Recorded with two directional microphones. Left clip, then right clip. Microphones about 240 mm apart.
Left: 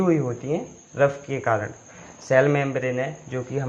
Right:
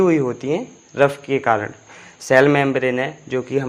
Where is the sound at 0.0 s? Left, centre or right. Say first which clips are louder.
Right 6 dB; right.